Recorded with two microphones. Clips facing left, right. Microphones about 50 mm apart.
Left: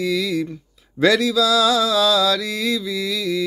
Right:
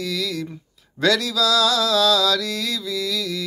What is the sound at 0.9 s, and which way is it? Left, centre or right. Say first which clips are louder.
Mantra: left 4 dB; centre.